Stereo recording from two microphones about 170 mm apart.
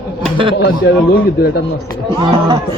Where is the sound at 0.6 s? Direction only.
80° left.